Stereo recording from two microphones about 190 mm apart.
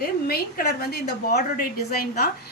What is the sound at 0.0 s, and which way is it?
A woman's voice, 55° left (ahead or behind).